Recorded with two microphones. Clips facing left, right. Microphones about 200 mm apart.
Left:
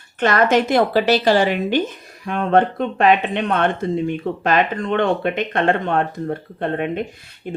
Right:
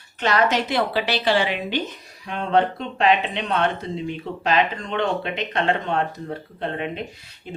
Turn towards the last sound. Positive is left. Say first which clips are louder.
# left 6 dB
turn(degrees=50)  # may be behind; listen again after turning